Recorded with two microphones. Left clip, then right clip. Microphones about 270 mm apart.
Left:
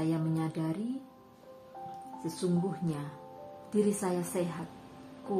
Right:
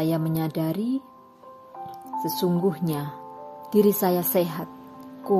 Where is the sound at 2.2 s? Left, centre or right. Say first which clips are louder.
Right 10 dB; right.